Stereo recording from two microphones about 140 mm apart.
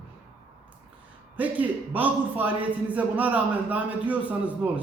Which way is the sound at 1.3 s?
10° right (ahead or behind).